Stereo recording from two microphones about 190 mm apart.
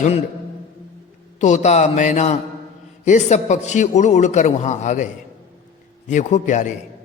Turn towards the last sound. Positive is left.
turn(degrees=40)  # may be behind; listen again after turning